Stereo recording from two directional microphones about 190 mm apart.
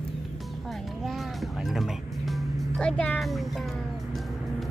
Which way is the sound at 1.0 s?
Centre (ahead or behind).